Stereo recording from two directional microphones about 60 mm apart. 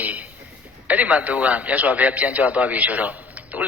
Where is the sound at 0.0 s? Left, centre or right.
Right.